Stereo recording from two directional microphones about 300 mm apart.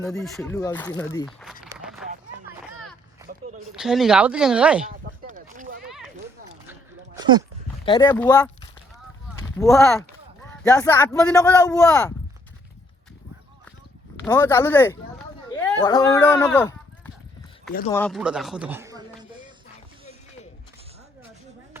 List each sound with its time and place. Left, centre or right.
0.0 s speech: centre
1.7 s a sound: centre
3.8 s speech: centre
5.2 s a sound: right
5.8 s a sound: centre
7.9 s speech: centre
9.6 s speech: centre
14.3 s speech: centre
17.9 s speech: centre